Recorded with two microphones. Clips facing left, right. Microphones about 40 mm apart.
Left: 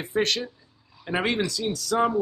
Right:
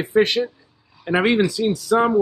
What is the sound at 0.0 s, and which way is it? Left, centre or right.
Speech, centre.